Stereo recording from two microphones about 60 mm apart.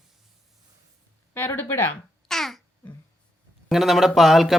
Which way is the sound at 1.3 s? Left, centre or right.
Left.